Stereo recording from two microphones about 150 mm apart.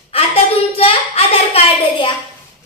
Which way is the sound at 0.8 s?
40° left (ahead or behind).